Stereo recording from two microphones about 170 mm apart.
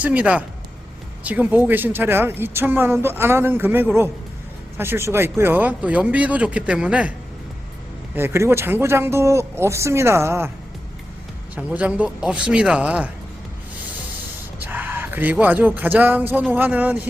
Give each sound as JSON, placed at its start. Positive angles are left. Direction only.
{"t": 0.0, "sound": "speech", "side_deg": -10}
{"t": 8.1, "sound": "speech", "side_deg": -15}
{"t": 11.5, "sound": "speech", "side_deg": -10}
{"t": 14.6, "sound": "speech", "side_deg": -10}